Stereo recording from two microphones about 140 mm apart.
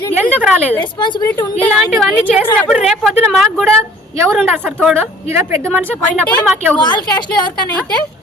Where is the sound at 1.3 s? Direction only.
15° left (ahead or behind).